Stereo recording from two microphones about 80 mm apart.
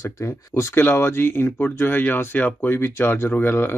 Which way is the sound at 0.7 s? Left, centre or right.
Left.